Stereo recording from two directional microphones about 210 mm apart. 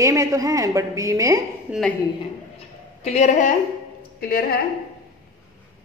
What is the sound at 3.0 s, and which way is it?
Speech, 30° left (ahead or behind).